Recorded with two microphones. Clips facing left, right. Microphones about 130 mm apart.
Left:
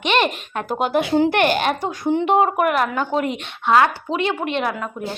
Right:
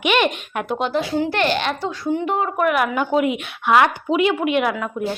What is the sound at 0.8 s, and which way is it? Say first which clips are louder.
Speech: left 3 dB; 50° left (ahead or behind).